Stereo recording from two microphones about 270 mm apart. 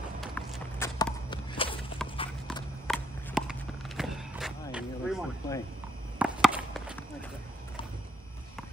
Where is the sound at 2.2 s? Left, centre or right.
Centre.